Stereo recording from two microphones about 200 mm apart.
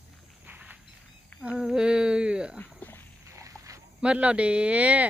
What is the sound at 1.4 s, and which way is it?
Humming, 5° right (ahead or behind).